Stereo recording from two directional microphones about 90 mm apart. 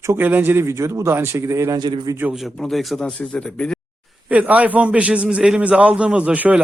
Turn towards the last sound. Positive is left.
turn(degrees=-15)  # may be behind; listen again after turning